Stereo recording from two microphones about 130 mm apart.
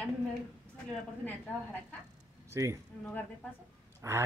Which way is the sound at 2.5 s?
25° right (ahead or behind).